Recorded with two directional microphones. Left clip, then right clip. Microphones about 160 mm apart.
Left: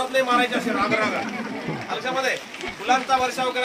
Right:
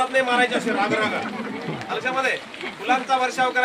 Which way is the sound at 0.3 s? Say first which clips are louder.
Right 1 dB; 15° right (ahead or behind).